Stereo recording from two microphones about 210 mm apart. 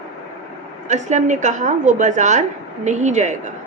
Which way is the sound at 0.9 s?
35° right (ahead or behind).